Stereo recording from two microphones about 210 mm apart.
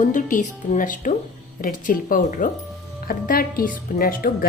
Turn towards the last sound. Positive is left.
turn(degrees=45)  # may be behind; listen again after turning